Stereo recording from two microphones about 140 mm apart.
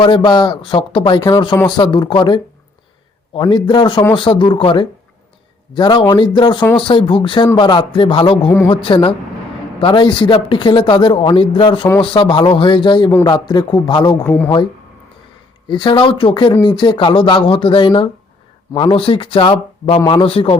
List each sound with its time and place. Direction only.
0.0 s speech: 35° left (ahead or behind)
3.5 s speech: 35° left (ahead or behind)
14.3 s speech: 15° left (ahead or behind)
15.6 s speech: 35° left (ahead or behind)